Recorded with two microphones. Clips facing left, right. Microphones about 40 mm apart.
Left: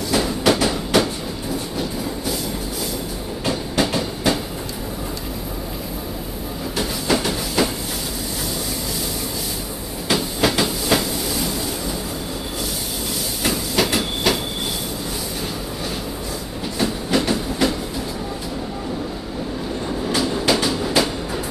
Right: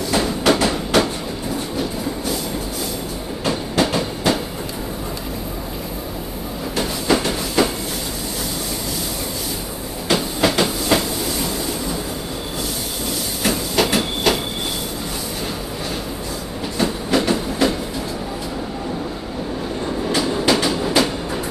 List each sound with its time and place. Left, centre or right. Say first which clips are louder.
0.1 s train: right 1 dB; centre
3.4 s train: right 2 dB; centre
6.8 s train: right 2 dB; centre
10.6 s train: right 2 dB; centre
13.4 s train: right 2 dB; centre
16.7 s train: right 1 dB; centre
20.1 s train: right 1 dB; centre